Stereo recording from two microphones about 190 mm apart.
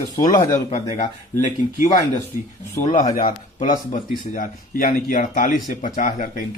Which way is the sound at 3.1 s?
45° left (ahead or behind).